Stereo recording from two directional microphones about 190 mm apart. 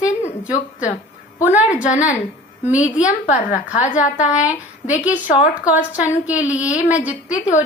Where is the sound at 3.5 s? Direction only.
10° right (ahead or behind).